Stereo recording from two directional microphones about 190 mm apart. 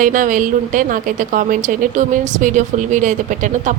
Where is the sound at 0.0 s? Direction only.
45° right (ahead or behind).